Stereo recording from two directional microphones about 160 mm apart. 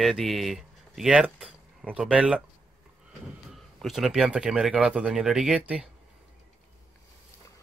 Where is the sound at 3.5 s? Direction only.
Centre (ahead or behind).